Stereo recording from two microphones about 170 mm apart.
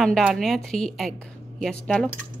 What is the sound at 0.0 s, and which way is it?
A woman's voice, centre (ahead or behind).